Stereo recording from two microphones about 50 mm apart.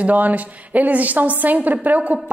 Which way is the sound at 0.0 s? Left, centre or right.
Right.